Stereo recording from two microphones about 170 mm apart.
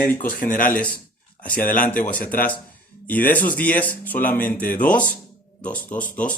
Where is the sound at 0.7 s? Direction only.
10° left (ahead or behind).